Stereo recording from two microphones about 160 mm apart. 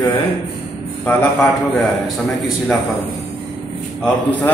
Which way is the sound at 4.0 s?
10° left (ahead or behind).